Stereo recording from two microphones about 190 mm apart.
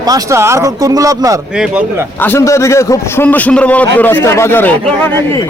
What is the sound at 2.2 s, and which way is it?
A man's voice, 10° left (ahead or behind).